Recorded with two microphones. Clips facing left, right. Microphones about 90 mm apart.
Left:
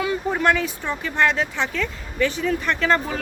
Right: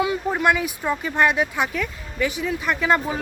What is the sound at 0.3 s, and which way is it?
Speech, 10° right (ahead or behind).